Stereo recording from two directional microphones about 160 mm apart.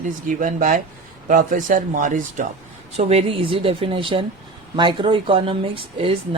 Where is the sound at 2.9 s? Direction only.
40° right (ahead or behind).